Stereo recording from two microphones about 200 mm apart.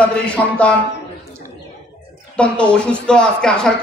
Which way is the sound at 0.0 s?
5° left (ahead or behind).